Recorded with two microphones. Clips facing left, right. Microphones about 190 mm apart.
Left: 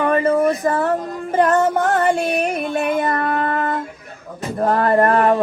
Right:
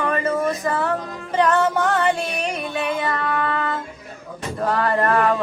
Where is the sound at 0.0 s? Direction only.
55° left (ahead or behind).